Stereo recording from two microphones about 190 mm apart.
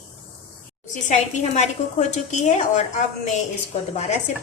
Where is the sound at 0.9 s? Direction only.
40° left (ahead or behind).